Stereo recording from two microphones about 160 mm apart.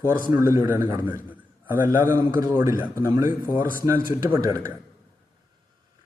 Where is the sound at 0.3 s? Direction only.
15° right (ahead or behind).